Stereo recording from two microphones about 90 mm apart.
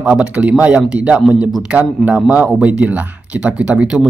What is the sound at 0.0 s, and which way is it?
Speech, 10° right (ahead or behind).